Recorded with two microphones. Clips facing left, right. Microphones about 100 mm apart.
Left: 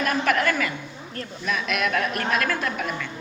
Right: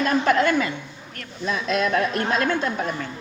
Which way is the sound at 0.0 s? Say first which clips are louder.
Right 3 dB; 25° right (ahead or behind).